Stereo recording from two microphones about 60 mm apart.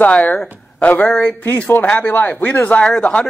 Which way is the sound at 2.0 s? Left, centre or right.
Left.